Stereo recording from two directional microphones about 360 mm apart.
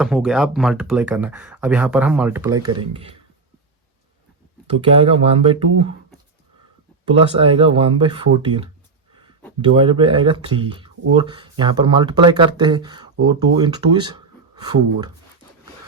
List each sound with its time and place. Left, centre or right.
0.0 s speech: centre
4.6 s speech: centre
7.1 s speech: centre
9.6 s speech: centre